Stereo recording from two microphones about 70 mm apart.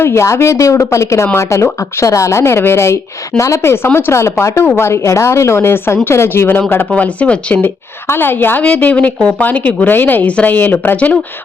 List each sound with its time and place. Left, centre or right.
0.0 s speech: left
6.9 s speech: centre
8.0 s speech: left
8.6 s speech: centre